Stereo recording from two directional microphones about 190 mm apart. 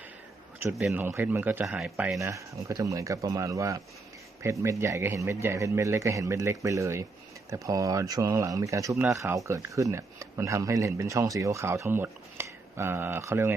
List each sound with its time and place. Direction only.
0.8 s speech: 5° right (ahead or behind)
2.1 s speech: 15° right (ahead or behind)